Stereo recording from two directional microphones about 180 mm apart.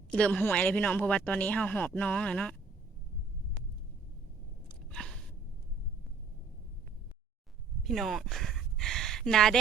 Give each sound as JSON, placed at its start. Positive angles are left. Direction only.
{"t": 0.1, "sound": "speech", "side_deg": 5}
{"t": 4.9, "sound": "gasp", "side_deg": 5}
{"t": 7.9, "sound": "a sound", "side_deg": 0}